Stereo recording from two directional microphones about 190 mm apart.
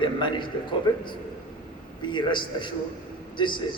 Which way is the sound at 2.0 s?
25° left (ahead or behind).